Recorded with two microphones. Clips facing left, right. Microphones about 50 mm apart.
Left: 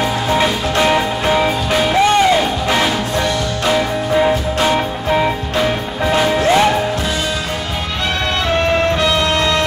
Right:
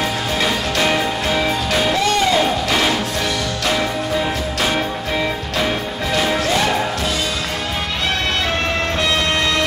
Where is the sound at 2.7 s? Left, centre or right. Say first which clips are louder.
Left 2 dB; centre.